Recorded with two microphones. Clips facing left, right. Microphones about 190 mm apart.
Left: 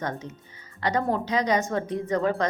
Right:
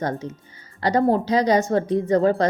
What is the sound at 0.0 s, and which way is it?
A woman's voice, 35° right (ahead or behind).